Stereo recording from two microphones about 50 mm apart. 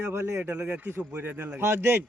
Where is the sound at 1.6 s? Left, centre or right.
Right.